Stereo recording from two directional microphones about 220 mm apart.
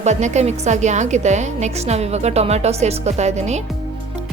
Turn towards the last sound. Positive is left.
turn(degrees=-30)  # may be behind; listen again after turning